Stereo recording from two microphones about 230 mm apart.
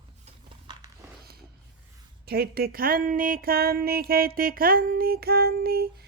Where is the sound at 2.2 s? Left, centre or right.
Right.